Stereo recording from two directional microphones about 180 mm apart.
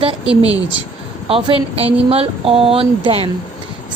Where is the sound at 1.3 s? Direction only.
30° right (ahead or behind).